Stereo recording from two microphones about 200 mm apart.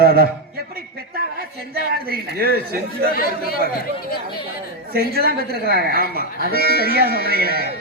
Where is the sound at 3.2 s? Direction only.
45° left (ahead or behind).